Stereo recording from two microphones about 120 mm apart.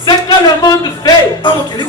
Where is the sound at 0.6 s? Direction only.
35° left (ahead or behind).